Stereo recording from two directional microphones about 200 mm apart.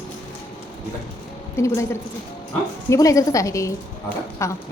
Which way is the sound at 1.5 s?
15° left (ahead or behind).